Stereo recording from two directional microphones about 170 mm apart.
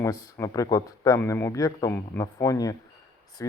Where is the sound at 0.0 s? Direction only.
15° left (ahead or behind).